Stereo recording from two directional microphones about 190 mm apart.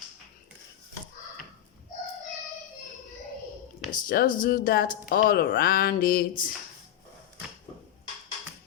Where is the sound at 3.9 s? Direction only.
45° left (ahead or behind).